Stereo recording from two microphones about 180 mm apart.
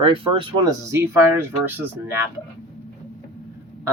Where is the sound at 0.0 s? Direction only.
30° right (ahead or behind).